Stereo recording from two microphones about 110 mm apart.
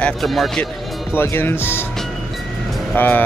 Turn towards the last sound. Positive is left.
turn(degrees=20)  # may be behind; listen again after turning